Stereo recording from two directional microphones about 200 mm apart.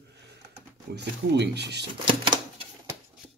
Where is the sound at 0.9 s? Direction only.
60° right (ahead or behind).